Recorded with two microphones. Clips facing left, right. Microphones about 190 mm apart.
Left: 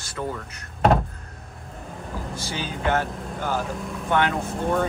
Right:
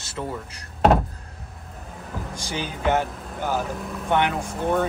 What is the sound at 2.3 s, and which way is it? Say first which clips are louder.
Speech: right 1 dB; 15° right (ahead or behind).